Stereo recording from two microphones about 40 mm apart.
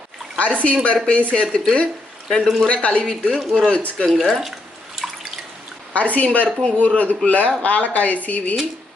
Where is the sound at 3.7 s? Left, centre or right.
Left.